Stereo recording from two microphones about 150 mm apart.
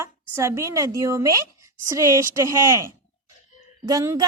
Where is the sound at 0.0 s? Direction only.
15° right (ahead or behind).